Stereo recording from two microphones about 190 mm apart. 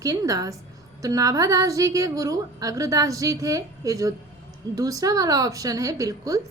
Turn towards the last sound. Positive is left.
turn(degrees=-20)  # may be behind; listen again after turning